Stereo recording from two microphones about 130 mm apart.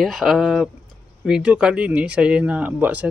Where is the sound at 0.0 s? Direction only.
Centre (ahead or behind).